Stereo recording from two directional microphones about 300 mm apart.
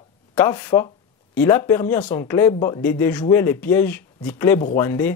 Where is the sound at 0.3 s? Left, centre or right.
Centre.